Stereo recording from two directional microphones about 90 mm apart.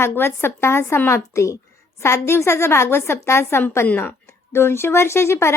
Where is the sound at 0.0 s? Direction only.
25° left (ahead or behind).